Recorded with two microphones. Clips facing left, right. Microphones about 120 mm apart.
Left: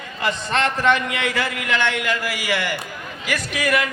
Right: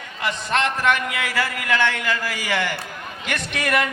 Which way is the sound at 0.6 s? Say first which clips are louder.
Left 4 dB; 30° left (ahead or behind).